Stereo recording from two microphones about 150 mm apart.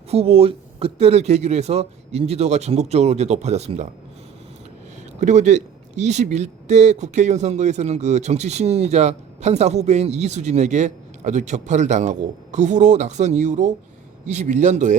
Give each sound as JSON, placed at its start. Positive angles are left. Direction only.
{"t": 0.1, "sound": "speech", "side_deg": -40}
{"t": 5.2, "sound": "speech", "side_deg": -50}